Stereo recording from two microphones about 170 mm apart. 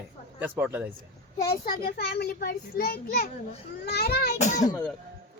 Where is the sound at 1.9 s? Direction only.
70° left (ahead or behind).